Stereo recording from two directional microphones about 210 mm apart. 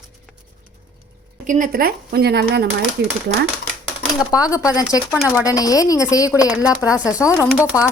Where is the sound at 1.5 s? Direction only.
40° right (ahead or behind).